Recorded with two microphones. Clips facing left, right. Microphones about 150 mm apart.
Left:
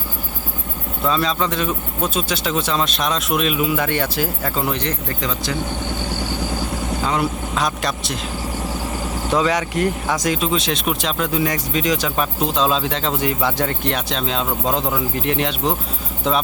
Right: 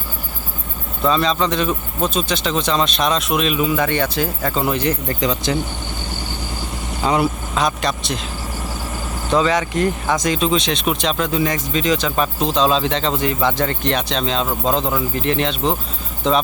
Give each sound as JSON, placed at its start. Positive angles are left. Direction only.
{"t": 1.0, "sound": "speech", "side_deg": 5}
{"t": 5.2, "sound": "speech", "side_deg": -20}
{"t": 7.1, "sound": "speech", "side_deg": -5}
{"t": 9.3, "sound": "speech", "side_deg": 10}